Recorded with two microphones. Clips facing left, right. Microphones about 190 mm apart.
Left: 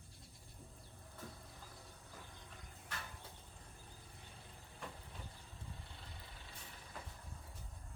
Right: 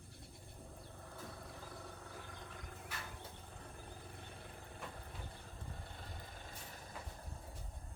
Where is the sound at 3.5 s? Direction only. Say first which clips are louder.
Right 7 dB; 65° right (ahead or behind); by 6.9 s 45° right (ahead or behind).